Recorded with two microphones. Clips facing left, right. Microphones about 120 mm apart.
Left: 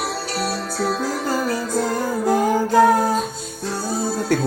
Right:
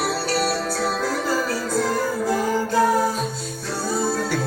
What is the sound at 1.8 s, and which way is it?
Music, 55° left (ahead or behind).